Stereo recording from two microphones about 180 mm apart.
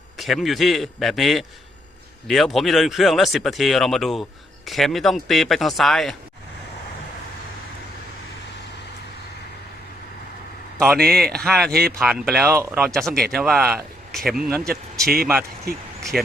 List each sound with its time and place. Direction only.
0.2 s speech: centre (ahead or behind)
10.8 s speech: centre (ahead or behind)
11.2 s speech: 60° right (ahead or behind)
11.4 s speech: centre (ahead or behind)
15.7 s speech: 55° right (ahead or behind)
16.1 s speech: 5° right (ahead or behind)